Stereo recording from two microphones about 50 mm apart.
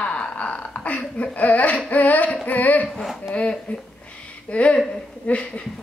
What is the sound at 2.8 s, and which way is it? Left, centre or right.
Speech, centre.